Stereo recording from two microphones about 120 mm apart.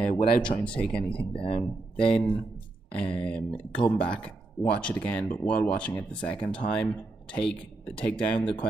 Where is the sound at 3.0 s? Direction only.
10° left (ahead or behind).